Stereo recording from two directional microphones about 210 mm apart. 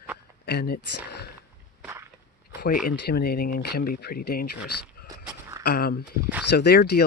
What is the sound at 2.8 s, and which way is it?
Speech, 45° left (ahead or behind).